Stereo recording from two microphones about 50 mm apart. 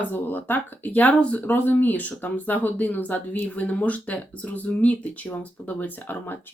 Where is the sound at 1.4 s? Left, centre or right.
Left.